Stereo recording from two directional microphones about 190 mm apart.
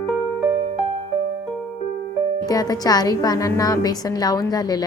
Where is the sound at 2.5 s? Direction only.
20° left (ahead or behind).